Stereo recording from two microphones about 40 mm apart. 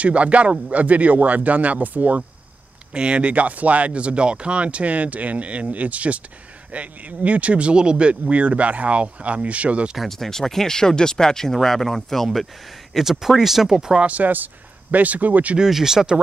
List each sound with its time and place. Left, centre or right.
0.0 s speech: right
2.9 s speech: right
10.0 s speech: centre
12.9 s speech: centre
14.0 s speech: right
15.7 s speech: centre